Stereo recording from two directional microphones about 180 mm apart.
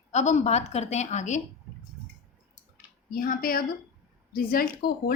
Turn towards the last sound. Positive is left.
turn(degrees=55)  # may be behind; listen again after turning